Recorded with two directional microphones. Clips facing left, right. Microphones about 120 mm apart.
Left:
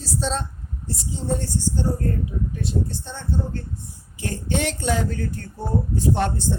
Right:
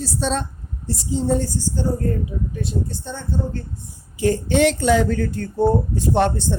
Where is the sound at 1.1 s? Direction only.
90° right.